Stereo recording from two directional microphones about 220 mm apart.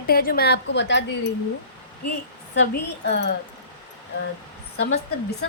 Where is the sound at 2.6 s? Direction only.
50° left (ahead or behind).